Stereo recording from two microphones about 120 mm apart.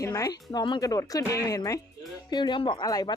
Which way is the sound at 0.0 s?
30° left (ahead or behind).